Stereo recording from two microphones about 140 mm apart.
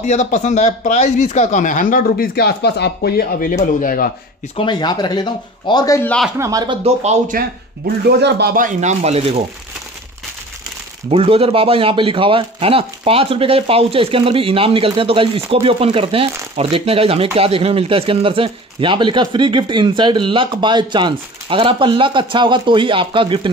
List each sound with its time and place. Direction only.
0.0 s speech: 55° left (ahead or behind); by 3.5 s 90° left
3.6 s speech: 75° left (ahead or behind)
4.6 s speech: 30° left (ahead or behind)
6.3 s speech: 25° right (ahead or behind)
6.8 s speech: 50° right (ahead or behind)
8.5 s speech: 65° right (ahead or behind); by 9.4 s 45° right (ahead or behind)
11.1 s speech: 45° right (ahead or behind)